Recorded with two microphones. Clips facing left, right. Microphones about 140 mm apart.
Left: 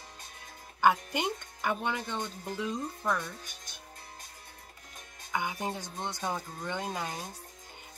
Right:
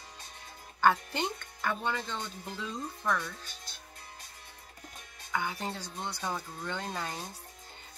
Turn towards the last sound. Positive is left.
turn(degrees=15)  # may be behind; listen again after turning